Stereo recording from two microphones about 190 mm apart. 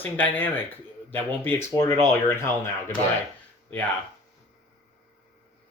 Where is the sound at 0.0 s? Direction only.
10° left (ahead or behind).